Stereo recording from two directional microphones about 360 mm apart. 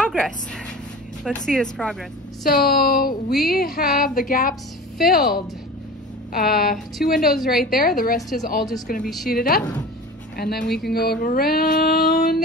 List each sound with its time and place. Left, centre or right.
0.0 s a sound: centre
1.2 s speech: centre
2.4 s a woman's voice: left
7.2 s speech: centre
7.7 s a woman's voice: left
9.0 s speech: centre
9.3 s a woman's voice: left